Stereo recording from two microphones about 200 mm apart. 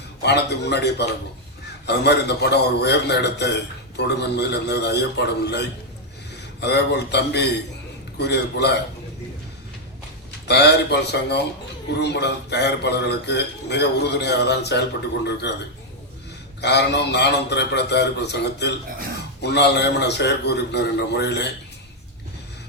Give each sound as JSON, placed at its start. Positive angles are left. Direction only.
{"t": 0.2, "sound": "a man's voice", "side_deg": 60}
{"t": 10.5, "sound": "a man's voice", "side_deg": 55}
{"t": 16.6, "sound": "a man's voice", "side_deg": 60}